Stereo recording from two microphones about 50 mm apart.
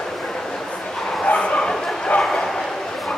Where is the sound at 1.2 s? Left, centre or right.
Left.